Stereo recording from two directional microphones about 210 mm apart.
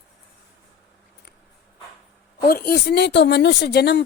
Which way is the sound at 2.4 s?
45° left (ahead or behind).